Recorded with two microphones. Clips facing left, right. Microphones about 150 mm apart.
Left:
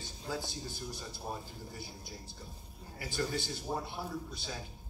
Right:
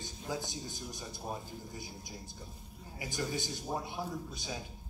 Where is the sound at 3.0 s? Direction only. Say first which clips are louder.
Left 1 dB; 15° right (ahead or behind).